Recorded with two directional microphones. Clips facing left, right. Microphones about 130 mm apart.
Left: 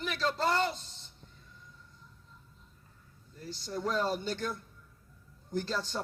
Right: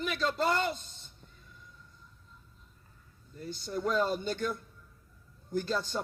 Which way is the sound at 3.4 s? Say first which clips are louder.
Right 2 dB; 50° right (ahead or behind).